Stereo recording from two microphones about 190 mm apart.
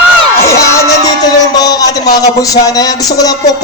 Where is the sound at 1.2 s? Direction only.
20° left (ahead or behind).